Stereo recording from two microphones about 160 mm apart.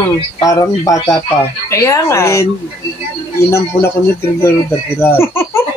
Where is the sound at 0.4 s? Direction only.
20° left (ahead or behind).